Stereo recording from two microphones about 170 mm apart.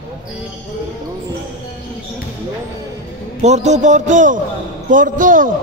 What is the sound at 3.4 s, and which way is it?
A man's voice, 40° right (ahead or behind).